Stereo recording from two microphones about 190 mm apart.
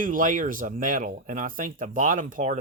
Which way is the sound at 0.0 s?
45° right (ahead or behind).